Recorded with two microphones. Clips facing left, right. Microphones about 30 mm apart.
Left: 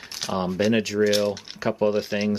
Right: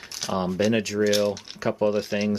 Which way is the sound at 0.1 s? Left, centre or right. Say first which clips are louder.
Even; centre.